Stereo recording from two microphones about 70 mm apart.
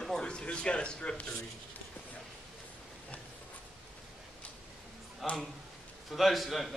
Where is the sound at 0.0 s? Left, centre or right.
Centre.